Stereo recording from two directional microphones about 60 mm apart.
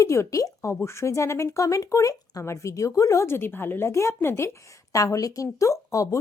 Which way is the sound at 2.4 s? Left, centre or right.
Left.